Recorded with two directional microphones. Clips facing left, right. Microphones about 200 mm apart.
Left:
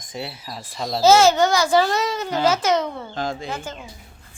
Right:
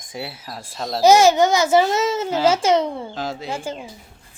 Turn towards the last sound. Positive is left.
turn(degrees=-30)  # may be behind; listen again after turning